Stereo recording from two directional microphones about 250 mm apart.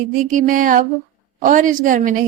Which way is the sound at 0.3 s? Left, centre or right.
Right.